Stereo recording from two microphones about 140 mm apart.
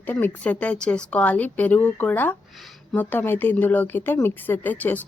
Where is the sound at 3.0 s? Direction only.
15° left (ahead or behind).